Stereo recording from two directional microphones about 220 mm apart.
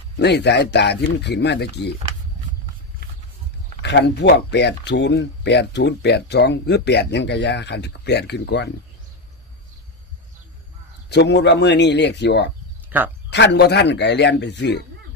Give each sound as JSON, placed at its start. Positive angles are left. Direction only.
{"t": 0.2, "sound": "speech", "side_deg": 50}
{"t": 3.8, "sound": "speech", "side_deg": 50}
{"t": 11.1, "sound": "speech", "side_deg": 50}
{"t": 12.9, "sound": "speech", "side_deg": -10}
{"t": 13.3, "sound": "speech", "side_deg": 50}